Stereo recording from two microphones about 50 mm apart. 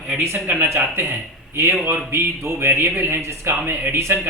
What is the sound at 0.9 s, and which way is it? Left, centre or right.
Speech, right.